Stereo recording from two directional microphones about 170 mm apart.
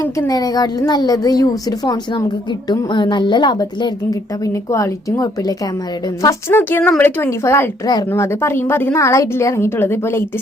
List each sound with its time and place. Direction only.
0.2 s speech: 20° left (ahead or behind)